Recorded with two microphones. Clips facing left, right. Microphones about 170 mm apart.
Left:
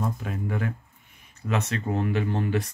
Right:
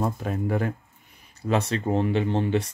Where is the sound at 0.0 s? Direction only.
40° right (ahead or behind).